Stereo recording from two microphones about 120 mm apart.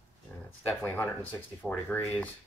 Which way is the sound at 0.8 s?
15° left (ahead or behind).